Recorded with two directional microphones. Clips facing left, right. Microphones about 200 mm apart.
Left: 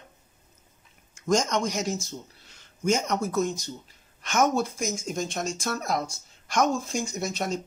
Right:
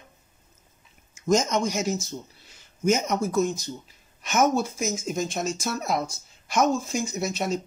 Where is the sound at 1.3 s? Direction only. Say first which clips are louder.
Right 2 dB; 5° right (ahead or behind).